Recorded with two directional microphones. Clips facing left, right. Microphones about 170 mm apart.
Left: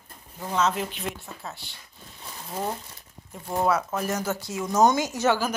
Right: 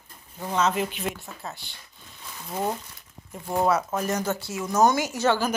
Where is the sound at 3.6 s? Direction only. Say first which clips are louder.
Right 1 dB; 10° right (ahead or behind).